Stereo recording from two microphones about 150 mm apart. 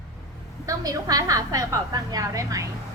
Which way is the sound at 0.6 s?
25° right (ahead or behind).